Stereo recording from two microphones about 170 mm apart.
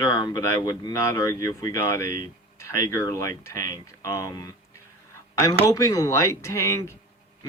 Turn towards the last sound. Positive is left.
turn(degrees=15)  # may be behind; listen again after turning